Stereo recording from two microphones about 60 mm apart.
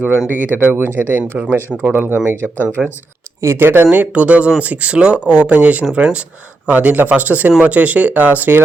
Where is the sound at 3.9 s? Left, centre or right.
Right.